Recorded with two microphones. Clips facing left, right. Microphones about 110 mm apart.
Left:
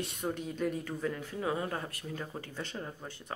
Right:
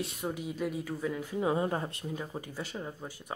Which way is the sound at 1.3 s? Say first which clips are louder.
Right 7 dB; 25° right (ahead or behind).